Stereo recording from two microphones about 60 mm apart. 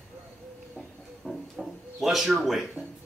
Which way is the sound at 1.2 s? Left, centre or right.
Centre.